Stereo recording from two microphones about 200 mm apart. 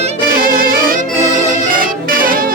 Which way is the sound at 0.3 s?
45° right (ahead or behind).